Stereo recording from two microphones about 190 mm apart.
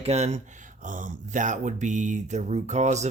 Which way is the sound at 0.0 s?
35° right (ahead or behind).